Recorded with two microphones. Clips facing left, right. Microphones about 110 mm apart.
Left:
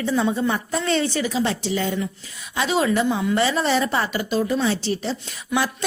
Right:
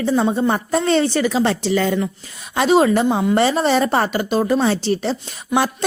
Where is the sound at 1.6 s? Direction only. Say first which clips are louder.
Right 6 dB; 80° right; by 4.8 s 50° right (ahead or behind).